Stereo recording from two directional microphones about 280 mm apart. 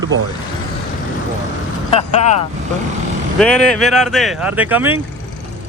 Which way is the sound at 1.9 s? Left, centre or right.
Left.